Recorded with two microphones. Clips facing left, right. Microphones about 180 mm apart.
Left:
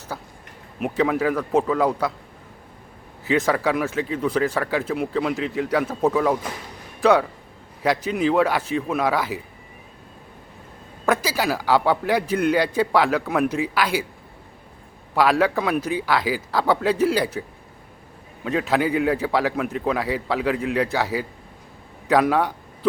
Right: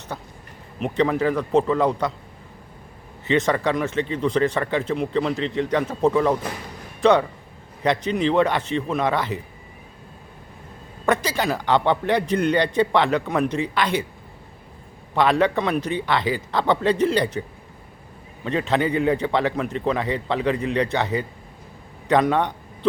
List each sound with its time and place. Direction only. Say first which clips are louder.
0.1 s a man's voice: even; 5° left (ahead or behind)
3.2 s a man's voice: even; 5° left (ahead or behind)
11.0 s a man's voice: even; 5° left (ahead or behind)
15.1 s a man's voice: even; 5° left (ahead or behind)
18.4 s a man's voice: even; 5° left (ahead or behind)